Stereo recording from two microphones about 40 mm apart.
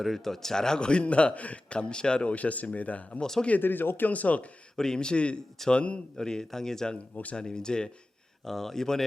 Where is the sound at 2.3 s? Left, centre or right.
Left.